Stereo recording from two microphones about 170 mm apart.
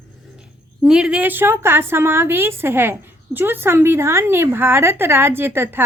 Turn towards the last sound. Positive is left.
turn(degrees=-15)  # may be behind; listen again after turning